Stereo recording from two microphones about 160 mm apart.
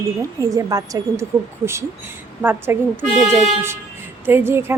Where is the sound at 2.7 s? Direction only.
15° right (ahead or behind).